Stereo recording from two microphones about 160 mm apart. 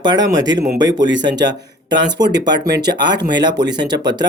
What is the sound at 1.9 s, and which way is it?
Speech, 25° right (ahead or behind).